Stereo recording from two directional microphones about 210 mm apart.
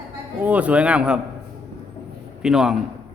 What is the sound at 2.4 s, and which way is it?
Speech, centre (ahead or behind).